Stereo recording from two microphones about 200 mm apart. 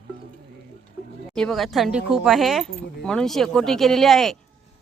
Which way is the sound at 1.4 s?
Centre (ahead or behind).